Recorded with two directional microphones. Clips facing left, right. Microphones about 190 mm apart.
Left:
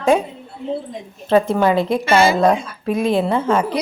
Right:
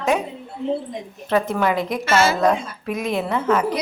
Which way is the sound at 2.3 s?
30° left (ahead or behind).